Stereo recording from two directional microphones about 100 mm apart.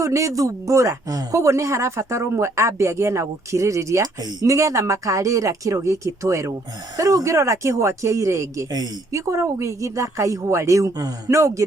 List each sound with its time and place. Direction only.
0.0 s a man's voice: 30° right (ahead or behind)